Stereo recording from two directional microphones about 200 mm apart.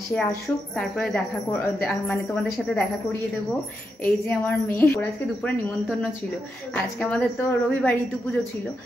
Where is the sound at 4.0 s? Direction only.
10° left (ahead or behind).